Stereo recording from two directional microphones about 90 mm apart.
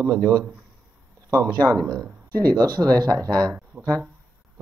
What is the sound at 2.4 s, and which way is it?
Speech, 45° right (ahead or behind).